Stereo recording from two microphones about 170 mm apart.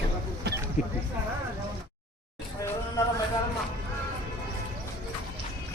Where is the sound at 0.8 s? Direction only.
50° left (ahead or behind).